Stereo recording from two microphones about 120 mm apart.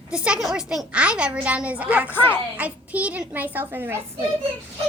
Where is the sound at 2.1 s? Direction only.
15° left (ahead or behind).